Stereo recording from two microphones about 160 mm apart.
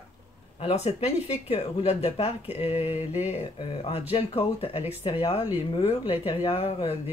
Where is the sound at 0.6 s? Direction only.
40° left (ahead or behind).